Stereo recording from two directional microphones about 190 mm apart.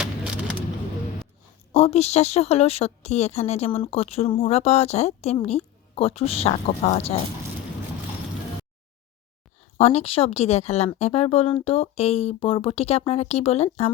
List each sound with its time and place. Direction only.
1.7 s a woman's voice: 35° left (ahead or behind)
9.7 s a woman's voice: 35° left (ahead or behind)